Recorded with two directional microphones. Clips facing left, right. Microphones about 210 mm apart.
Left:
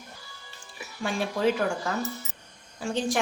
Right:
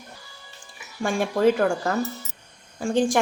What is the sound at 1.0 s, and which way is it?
A woman's voice, 50° right (ahead or behind).